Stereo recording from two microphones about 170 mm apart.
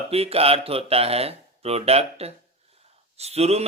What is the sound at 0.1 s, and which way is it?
A man's voice, 35° right (ahead or behind).